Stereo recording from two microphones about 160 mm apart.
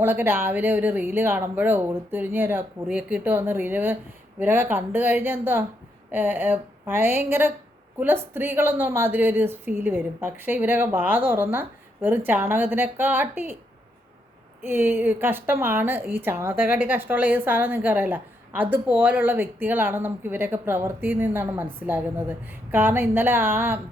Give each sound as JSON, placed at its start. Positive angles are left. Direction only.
{"t": 0.0, "sound": "a woman's voice", "side_deg": -15}
{"t": 14.6, "sound": "a woman's voice", "side_deg": -15}